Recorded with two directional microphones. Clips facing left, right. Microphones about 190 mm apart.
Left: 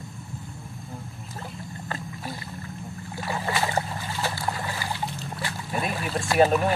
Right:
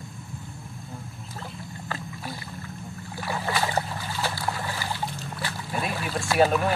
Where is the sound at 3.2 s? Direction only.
20° left (ahead or behind).